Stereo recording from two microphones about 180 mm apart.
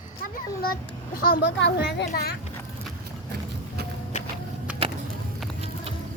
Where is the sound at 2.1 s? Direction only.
55° left (ahead or behind).